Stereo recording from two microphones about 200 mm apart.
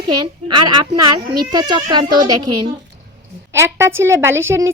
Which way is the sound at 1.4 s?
20° right (ahead or behind).